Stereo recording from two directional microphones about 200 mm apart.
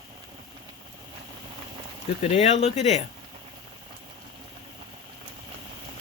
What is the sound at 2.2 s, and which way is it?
Speech, 30° left (ahead or behind).